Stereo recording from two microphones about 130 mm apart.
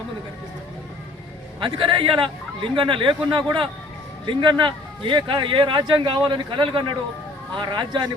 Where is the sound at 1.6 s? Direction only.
40° right (ahead or behind).